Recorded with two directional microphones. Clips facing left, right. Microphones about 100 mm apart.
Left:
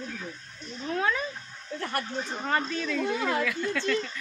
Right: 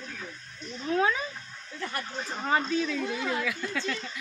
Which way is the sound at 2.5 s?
5° right (ahead or behind).